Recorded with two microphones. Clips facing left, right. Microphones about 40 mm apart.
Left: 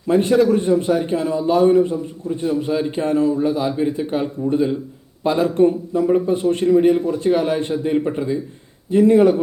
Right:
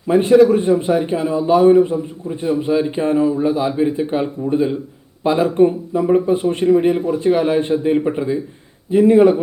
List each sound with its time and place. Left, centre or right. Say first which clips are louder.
0.4 s a man's voice: right 2 dB; right